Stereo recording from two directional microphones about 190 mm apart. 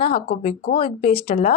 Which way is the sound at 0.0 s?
30° left (ahead or behind).